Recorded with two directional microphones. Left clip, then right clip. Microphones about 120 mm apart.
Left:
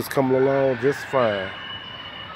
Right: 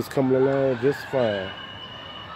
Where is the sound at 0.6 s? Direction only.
10° right (ahead or behind).